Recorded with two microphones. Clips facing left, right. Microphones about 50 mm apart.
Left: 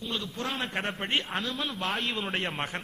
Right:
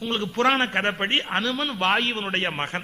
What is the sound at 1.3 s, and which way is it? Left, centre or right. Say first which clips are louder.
Speech: right 7 dB; right.